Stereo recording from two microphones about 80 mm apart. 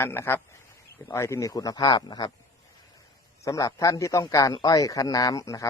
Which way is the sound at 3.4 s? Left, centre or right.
Left.